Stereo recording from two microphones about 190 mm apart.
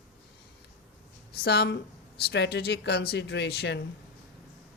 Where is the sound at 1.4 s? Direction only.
60° left (ahead or behind).